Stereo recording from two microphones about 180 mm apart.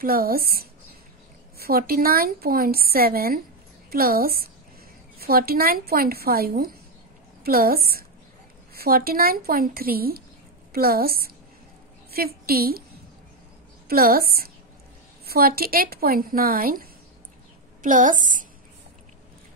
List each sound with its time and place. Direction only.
0.0 s a woman's voice: 55° right (ahead or behind)
13.8 s a woman's voice: 55° right (ahead or behind)
17.8 s a woman's voice: 45° right (ahead or behind)